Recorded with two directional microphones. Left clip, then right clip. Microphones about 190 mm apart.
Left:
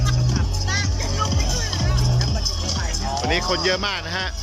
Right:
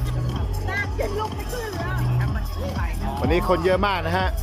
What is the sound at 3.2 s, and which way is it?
Speech, 5° right (ahead or behind).